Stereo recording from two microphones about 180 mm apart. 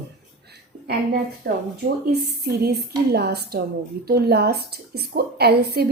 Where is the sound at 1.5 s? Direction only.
60° right (ahead or behind).